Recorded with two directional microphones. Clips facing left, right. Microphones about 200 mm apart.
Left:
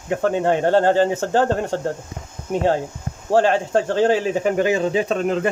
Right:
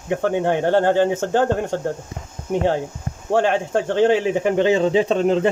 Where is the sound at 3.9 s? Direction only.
15° right (ahead or behind).